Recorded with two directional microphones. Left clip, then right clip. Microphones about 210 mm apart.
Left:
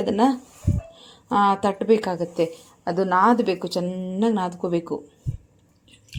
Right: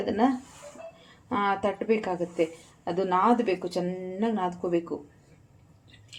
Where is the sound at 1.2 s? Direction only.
45° left (ahead or behind).